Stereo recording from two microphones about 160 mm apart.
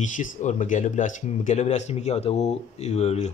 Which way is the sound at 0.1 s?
50° left (ahead or behind).